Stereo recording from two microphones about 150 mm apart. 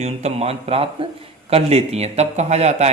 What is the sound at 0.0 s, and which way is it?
A man's voice, 45° right (ahead or behind).